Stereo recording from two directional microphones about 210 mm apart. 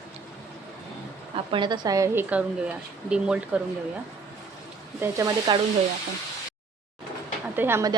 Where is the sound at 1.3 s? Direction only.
25° right (ahead or behind); by 3.6 s 5° right (ahead or behind).